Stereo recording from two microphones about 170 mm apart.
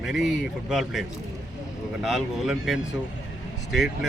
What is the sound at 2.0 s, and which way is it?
Speech, centre (ahead or behind).